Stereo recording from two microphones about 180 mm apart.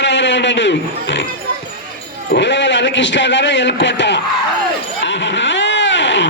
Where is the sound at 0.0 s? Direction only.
80° left.